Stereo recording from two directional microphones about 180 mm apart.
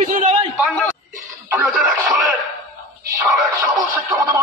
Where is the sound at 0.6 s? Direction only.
5° left (ahead or behind).